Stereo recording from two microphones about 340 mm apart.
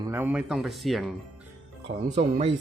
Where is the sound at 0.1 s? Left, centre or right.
Centre.